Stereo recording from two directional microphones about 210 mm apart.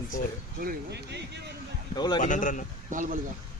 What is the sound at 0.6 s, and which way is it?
Speech, 50° right (ahead or behind).